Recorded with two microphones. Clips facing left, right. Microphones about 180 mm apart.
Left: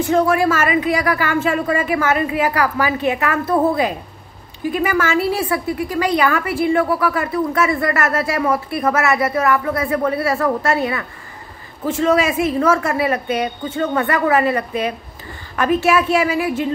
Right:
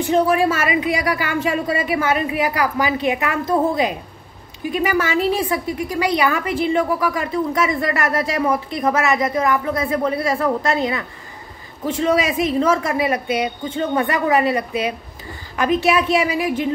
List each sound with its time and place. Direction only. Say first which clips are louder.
0.0 s speech: left 1 dB; 15° right (ahead or behind)